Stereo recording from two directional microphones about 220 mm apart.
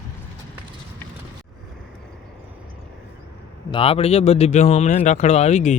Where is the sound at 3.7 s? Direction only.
25° left (ahead or behind).